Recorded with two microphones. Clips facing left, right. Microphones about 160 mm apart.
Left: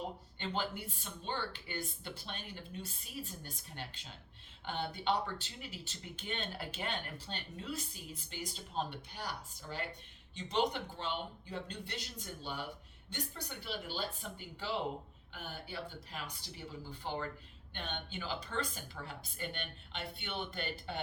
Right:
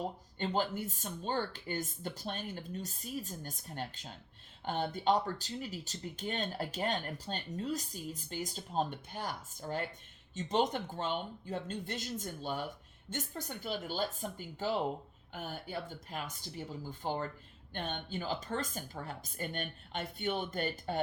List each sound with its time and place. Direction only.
0.3 s speech: 40° right (ahead or behind)